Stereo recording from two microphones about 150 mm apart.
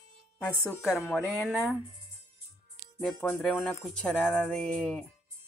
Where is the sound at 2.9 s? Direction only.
5° left (ahead or behind).